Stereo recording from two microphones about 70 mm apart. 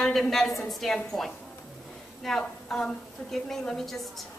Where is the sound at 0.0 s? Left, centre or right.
Centre.